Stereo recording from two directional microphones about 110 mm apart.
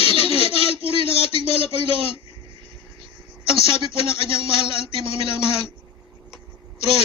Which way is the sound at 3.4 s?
50° right (ahead or behind).